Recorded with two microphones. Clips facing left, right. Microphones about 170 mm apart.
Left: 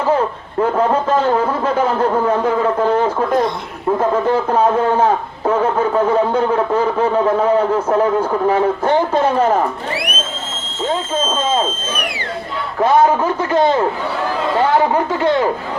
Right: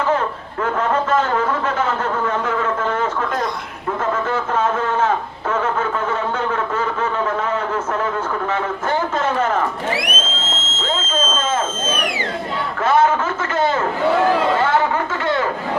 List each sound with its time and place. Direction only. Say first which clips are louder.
0.6 s a man's voice: left 4 dB; 30° left (ahead or behind)
10.9 s a sound: left 2 dB; 15° left (ahead or behind)
12.8 s a man's voice: left 4 dB; 15° left (ahead or behind)